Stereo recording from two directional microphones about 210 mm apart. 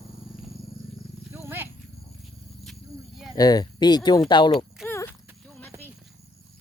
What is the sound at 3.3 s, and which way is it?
Speech, 20° left (ahead or behind).